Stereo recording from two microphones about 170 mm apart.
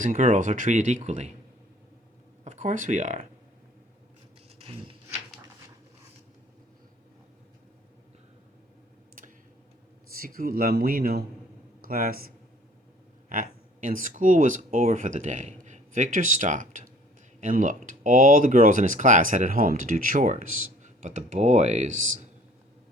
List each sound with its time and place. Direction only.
0.0 s speech: 50° right (ahead or behind)
2.4 s speech: 45° right (ahead or behind)
4.6 s a sound: 35° right (ahead or behind)
10.2 s a man's voice: 60° right (ahead or behind)
13.3 s speech: 55° right (ahead or behind)